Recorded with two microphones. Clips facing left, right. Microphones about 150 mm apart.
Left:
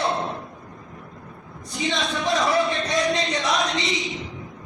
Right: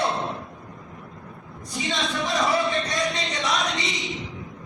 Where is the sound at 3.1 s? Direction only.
25° left (ahead or behind).